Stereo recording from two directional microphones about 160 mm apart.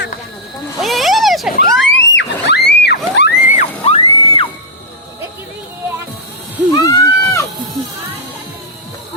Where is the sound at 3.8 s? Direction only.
35° left (ahead or behind).